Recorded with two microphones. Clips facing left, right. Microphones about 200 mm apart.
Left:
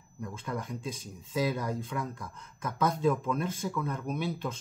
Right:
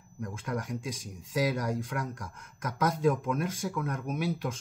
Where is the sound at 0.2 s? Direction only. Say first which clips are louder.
Right 2 dB; 10° right (ahead or behind).